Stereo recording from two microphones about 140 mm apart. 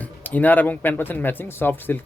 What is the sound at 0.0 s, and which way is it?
Speech, 10° left (ahead or behind).